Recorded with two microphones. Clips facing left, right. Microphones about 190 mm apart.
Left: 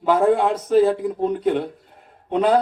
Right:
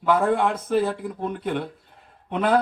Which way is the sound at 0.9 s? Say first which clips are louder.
Left 8 dB; 45° left (ahead or behind).